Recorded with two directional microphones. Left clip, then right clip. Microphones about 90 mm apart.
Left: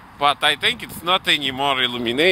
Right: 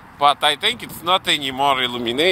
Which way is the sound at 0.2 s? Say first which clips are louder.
Right 2 dB; 60° left (ahead or behind).